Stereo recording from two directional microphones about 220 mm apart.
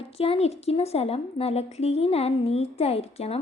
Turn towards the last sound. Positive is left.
turn(degrees=25)  # may be behind; listen again after turning